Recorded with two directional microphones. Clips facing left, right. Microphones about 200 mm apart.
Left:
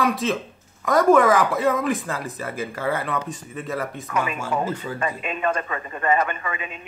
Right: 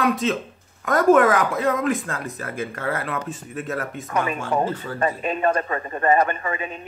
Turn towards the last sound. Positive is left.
turn(degrees=-40)  # may be behind; listen again after turning